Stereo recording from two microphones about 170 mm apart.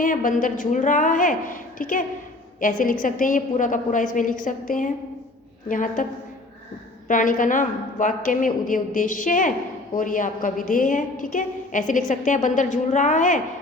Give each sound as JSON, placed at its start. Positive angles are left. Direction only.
{"t": 0.0, "sound": "a woman's voice", "side_deg": 50}
{"t": 7.1, "sound": "a woman's voice", "side_deg": 50}